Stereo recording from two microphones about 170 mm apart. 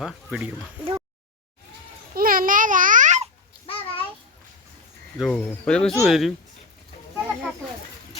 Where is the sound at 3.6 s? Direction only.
35° left (ahead or behind).